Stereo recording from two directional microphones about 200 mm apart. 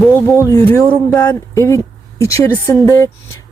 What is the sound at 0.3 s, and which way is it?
Speech, 15° left (ahead or behind).